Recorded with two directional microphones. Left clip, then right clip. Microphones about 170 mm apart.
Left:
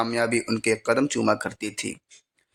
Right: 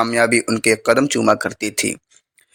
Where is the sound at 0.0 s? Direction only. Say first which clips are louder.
Right 8 dB; 20° right (ahead or behind).